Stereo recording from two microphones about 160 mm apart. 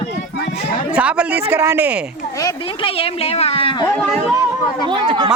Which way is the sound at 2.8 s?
40° left (ahead or behind).